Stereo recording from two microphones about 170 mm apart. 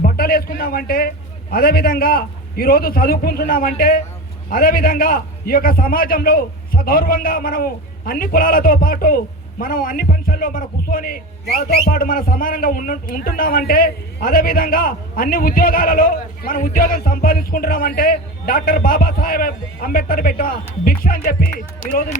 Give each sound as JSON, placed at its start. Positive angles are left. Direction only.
{"t": 0.0, "sound": "a man's voice", "side_deg": 60}